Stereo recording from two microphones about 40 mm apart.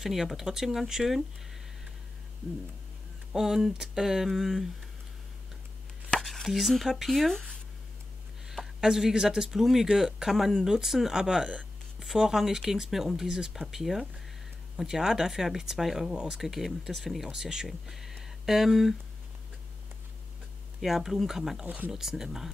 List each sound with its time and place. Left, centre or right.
0.0 s speech: centre
3.3 s speech: centre
6.2 s a sound: centre
6.9 s speech: centre
7.2 s speech: centre
8.8 s speech: centre
16.3 s speech: centre
17.3 s speech: centre
20.8 s speech: centre
21.6 s speech: right
21.9 s speech: centre